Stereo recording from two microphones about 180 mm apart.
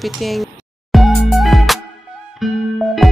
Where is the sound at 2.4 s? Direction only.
Centre (ahead or behind).